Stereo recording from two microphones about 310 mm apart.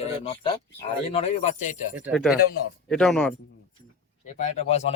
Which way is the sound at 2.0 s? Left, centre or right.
Centre.